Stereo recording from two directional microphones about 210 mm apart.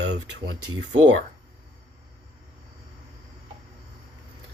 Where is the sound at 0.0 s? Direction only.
55° right (ahead or behind).